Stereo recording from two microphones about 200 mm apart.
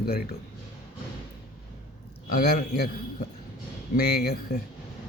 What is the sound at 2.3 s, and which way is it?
Speech, 50° left (ahead or behind).